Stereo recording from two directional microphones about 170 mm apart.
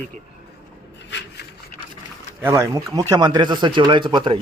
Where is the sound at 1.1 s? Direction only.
90° left.